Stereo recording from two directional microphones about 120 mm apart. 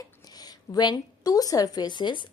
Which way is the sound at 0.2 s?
35° left (ahead or behind).